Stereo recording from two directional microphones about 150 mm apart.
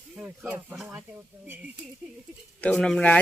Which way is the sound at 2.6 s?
10° left (ahead or behind).